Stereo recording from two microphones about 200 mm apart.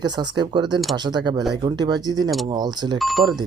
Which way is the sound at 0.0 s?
20° right (ahead or behind).